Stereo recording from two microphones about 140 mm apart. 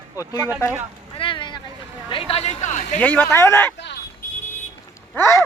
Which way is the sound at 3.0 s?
10° left (ahead or behind).